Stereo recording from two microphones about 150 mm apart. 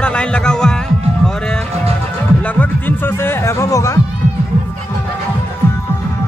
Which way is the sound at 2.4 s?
10° left (ahead or behind).